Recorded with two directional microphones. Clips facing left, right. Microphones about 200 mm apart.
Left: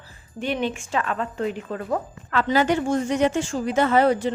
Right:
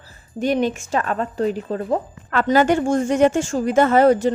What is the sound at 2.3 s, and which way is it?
A woman's voice, 50° right (ahead or behind).